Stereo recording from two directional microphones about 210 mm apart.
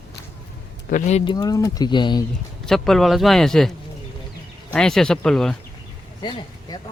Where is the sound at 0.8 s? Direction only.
35° left (ahead or behind).